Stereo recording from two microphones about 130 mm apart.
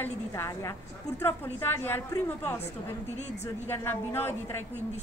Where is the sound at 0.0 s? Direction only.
20° left (ahead or behind).